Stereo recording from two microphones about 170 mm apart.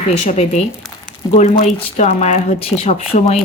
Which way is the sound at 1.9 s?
45° left (ahead or behind).